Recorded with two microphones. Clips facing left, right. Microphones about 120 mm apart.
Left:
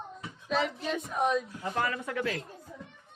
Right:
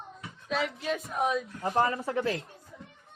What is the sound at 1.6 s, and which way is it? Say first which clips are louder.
Speech: right 5 dB; 30° right (ahead or behind).